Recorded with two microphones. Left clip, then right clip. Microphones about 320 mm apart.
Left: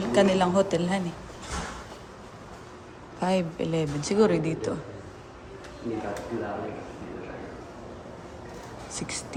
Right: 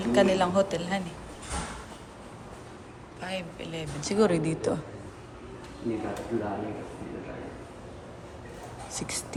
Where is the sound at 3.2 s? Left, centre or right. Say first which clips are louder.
Left 9 dB; centre.